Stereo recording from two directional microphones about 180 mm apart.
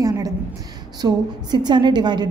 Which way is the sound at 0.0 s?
20° right (ahead or behind).